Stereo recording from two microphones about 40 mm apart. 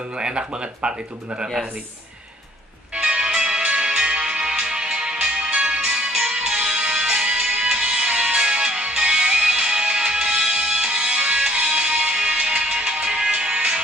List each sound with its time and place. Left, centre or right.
0.2 s speech: right
2.9 s music: right